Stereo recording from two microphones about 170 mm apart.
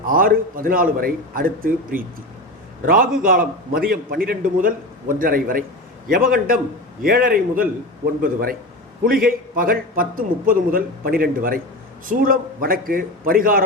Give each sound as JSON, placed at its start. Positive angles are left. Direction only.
{"t": 0.1, "sound": "a man's voice", "side_deg": -55}